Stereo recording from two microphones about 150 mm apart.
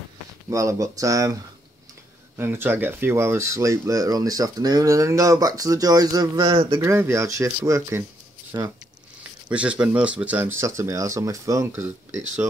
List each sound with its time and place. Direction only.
0.5 s speech: 20° right (ahead or behind)
6.8 s speech: 15° right (ahead or behind)
9.5 s speech: 10° right (ahead or behind)